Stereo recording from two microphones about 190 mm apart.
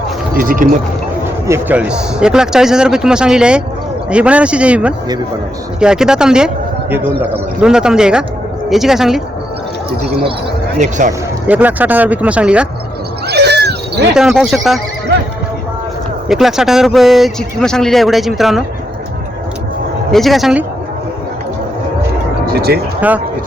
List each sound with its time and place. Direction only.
0.3 s speech: 45° right (ahead or behind)
1.5 s speech: 10° right (ahead or behind)
10.8 s speech: 40° right (ahead or behind)
11.4 s speech: 10° right (ahead or behind)
13.2 s cat: 60° right (ahead or behind)
14.1 s speech: 5° right (ahead or behind)
16.3 s speech: centre (ahead or behind)
20.1 s speech: centre (ahead or behind)
22.5 s speech: 55° right (ahead or behind)
23.0 s speech: 10° right (ahead or behind)